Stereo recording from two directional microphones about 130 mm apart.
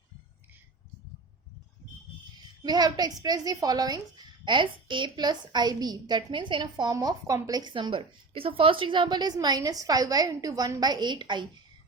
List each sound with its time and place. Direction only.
2.6 s a woman's voice: 30° right (ahead or behind)